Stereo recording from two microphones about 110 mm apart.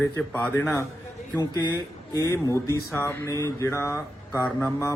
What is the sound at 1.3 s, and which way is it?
Speech, 40° left (ahead or behind).